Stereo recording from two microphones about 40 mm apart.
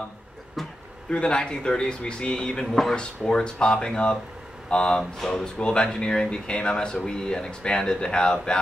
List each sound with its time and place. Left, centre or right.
0.6 s a sound: centre
1.1 s a man's voice: left
2.6 s speech: centre
3.3 s a man's voice: left
5.2 s speech: centre
5.6 s a man's voice: left